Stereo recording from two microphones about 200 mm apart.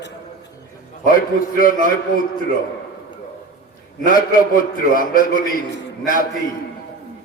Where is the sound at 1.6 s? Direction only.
45° left (ahead or behind).